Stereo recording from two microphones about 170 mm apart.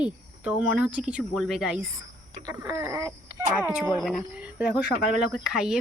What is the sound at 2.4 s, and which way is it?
Speech, 15° right (ahead or behind).